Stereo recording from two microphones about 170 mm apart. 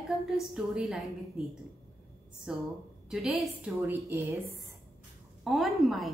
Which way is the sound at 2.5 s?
5° right (ahead or behind).